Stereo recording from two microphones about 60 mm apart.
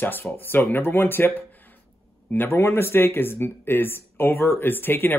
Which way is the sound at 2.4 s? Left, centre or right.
Left.